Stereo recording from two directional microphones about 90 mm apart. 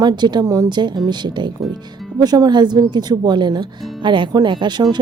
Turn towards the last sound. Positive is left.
turn(degrees=-55)  # may be behind; listen again after turning